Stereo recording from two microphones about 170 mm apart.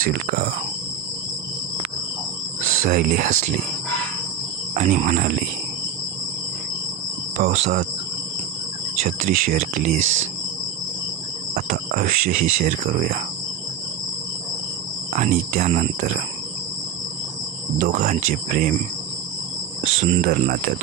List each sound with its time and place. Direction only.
0.0 s speech: 60° right (ahead or behind)
2.8 s speech: 60° right (ahead or behind)
4.7 s speech: 45° right (ahead or behind)
7.4 s speech: 40° right (ahead or behind)
9.0 s speech: 45° right (ahead or behind)
11.5 s speech: 55° right (ahead or behind)
15.1 s speech: 55° right (ahead or behind)
17.7 s speech: 45° right (ahead or behind)
19.8 s cricket: 35° right (ahead or behind)
20.2 s speech: 55° right (ahead or behind)